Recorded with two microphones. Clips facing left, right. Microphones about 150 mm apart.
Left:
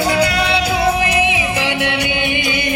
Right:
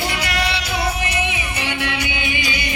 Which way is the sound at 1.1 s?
90° left.